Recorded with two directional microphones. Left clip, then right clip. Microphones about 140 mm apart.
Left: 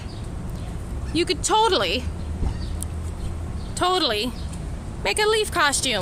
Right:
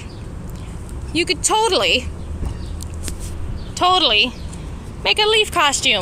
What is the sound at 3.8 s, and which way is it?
Speech, 15° left (ahead or behind).